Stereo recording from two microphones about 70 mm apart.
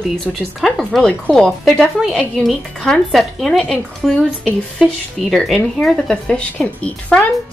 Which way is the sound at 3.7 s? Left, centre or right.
Centre.